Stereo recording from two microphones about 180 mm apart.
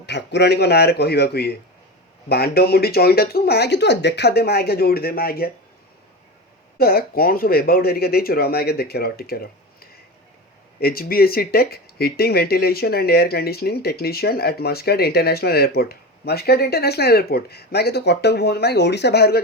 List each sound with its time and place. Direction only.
0.0 s speech: 70° left (ahead or behind)
6.7 s speech: 55° left (ahead or behind)